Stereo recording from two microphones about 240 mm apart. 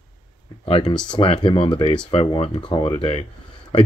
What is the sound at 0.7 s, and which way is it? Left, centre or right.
Speech, left.